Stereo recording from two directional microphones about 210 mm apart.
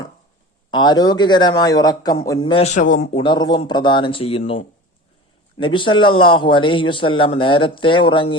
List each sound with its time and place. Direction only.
0.7 s a man's voice: 20° left (ahead or behind)